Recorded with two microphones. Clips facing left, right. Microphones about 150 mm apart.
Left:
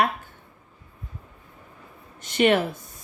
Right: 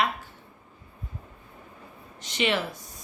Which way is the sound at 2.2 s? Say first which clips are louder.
Left 7 dB; 50° left (ahead or behind).